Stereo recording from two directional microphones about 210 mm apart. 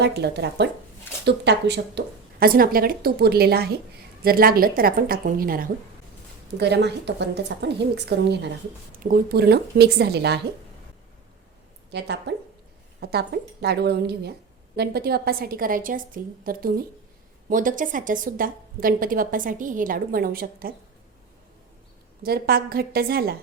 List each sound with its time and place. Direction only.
0.0 s speech: 55° right (ahead or behind)
11.9 s a woman's voice: 55° right (ahead or behind)
22.2 s speech: 45° right (ahead or behind)